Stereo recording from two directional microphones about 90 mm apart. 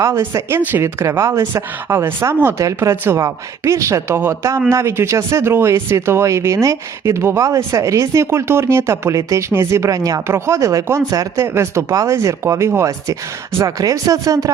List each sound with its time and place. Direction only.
0.0 s a man's voice: 30° right (ahead or behind)
10.2 s speech: 30° right (ahead or behind)